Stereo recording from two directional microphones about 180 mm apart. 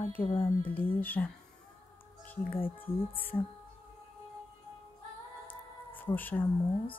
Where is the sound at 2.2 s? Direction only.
10° left (ahead or behind).